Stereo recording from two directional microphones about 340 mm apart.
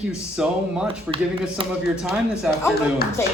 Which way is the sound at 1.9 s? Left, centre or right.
Centre.